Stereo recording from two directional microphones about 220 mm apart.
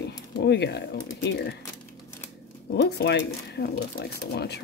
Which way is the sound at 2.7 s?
50° left (ahead or behind).